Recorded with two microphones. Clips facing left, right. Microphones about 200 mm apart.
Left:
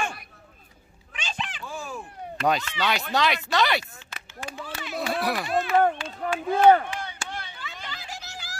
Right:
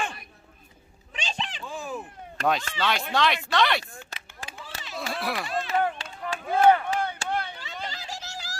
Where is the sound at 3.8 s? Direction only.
55° right (ahead or behind).